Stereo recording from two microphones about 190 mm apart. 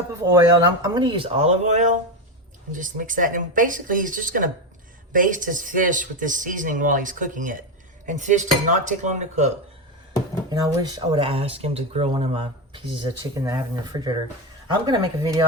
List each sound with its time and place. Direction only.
0.1 s speech: 20° right (ahead or behind); by 9.5 s 40° right (ahead or behind)
10.5 s speech: 20° right (ahead or behind)